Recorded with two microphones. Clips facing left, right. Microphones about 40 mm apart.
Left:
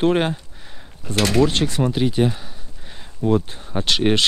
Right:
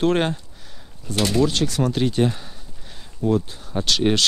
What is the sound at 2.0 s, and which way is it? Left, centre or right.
Speech, centre.